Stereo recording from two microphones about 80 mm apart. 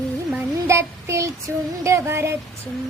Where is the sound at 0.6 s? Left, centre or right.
Right.